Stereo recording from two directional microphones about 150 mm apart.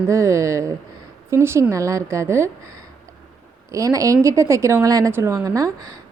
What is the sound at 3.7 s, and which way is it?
Speech, 20° right (ahead or behind).